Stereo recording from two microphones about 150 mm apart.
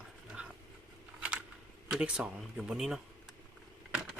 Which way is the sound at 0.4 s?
10° right (ahead or behind).